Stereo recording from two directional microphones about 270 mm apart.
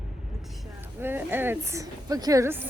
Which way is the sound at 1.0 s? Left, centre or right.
Centre.